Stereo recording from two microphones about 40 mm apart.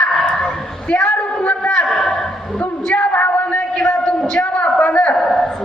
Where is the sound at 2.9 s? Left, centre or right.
Left.